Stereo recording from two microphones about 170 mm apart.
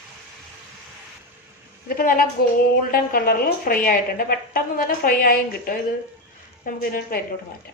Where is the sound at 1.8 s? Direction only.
55° left (ahead or behind).